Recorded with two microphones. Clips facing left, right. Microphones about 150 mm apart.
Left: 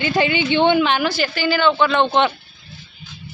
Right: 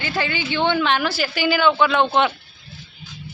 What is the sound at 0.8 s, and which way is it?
Speech, centre (ahead or behind).